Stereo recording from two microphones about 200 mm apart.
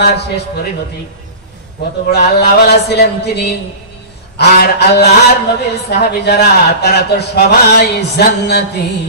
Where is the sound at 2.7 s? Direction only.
55° left (ahead or behind).